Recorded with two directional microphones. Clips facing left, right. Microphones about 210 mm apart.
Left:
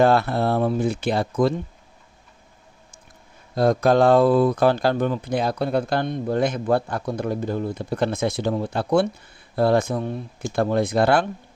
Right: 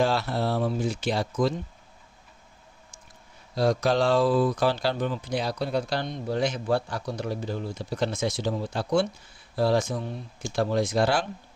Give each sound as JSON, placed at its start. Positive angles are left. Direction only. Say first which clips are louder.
{"t": 0.0, "sound": "speech", "louder": "left 7 dB", "side_deg": 55}
{"t": 3.5, "sound": "speech", "louder": "left 5 dB", "side_deg": 55}